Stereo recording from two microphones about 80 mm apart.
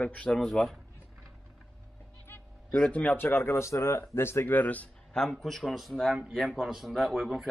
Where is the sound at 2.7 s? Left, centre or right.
Centre.